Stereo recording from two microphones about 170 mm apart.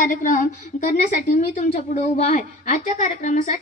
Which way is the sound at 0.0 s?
50° left (ahead or behind).